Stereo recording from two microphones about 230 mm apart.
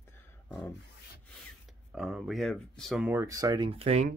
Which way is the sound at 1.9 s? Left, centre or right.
Centre.